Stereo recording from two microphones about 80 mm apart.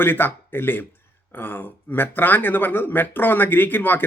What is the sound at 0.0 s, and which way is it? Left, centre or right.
Speech, left.